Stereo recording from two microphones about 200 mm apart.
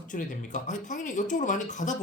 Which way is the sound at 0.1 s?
40° left (ahead or behind).